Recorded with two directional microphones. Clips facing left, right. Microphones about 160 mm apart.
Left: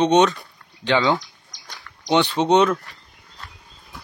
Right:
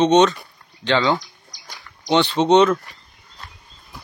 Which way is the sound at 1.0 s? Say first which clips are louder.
Even; centre (ahead or behind).